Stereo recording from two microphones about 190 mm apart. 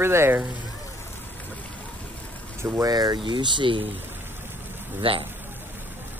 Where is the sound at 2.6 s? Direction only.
15° right (ahead or behind).